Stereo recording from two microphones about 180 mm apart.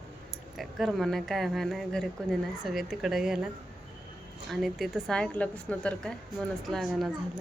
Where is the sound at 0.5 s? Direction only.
Centre (ahead or behind).